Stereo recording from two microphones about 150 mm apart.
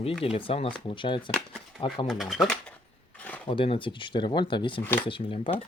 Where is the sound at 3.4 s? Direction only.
35° left (ahead or behind).